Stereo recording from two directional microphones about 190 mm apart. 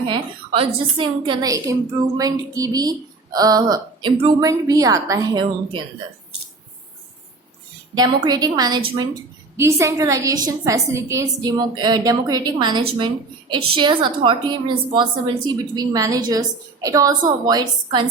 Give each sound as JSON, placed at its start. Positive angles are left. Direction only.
{"t": 0.0, "sound": "a woman's voice", "side_deg": -25}
{"t": 7.9, "sound": "a woman's voice", "side_deg": -20}